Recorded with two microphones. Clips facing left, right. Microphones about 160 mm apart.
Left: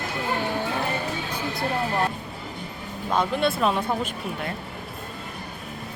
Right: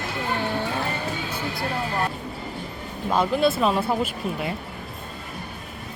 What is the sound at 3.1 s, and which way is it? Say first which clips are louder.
Speech: right 2 dB; 5° right (ahead or behind).